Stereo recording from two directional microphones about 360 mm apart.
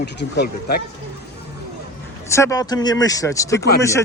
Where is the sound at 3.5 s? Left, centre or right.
Left.